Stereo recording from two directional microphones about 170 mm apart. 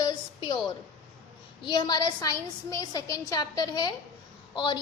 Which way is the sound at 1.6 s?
25° left (ahead or behind).